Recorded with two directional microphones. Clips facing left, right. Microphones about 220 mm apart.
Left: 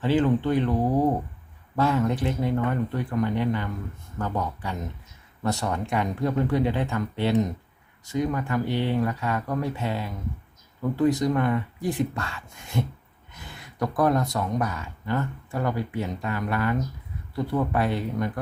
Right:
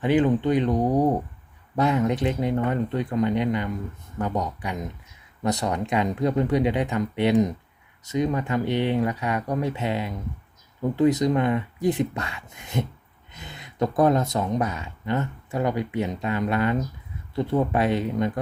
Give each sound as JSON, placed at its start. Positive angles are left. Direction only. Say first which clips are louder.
{"t": 0.0, "sound": "speech", "louder": "right 2 dB", "side_deg": -15}